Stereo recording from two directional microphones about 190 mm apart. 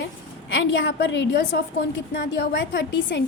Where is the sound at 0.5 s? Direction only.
75° left (ahead or behind).